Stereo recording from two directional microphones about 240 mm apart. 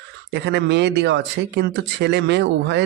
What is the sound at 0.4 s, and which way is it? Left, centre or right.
Speech, right.